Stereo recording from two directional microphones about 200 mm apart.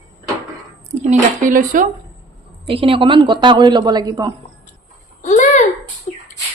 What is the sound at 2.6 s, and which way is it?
Speech, 25° right (ahead or behind).